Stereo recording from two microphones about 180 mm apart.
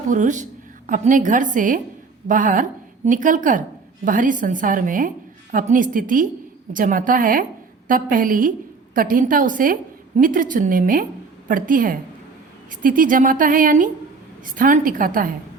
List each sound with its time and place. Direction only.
0.1 s a woman's voice: 45° right (ahead or behind)